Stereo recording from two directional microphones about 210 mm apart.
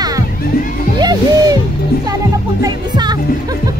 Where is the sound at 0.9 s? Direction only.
20° right (ahead or behind).